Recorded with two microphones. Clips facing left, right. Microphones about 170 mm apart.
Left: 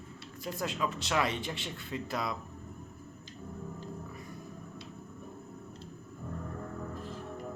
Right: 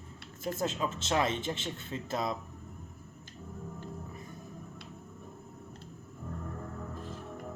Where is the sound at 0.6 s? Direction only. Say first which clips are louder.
Even; 25° right (ahead or behind).